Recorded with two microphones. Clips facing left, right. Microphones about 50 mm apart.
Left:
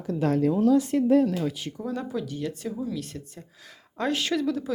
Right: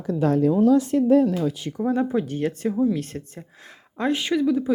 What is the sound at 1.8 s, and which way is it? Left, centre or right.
Speech, right.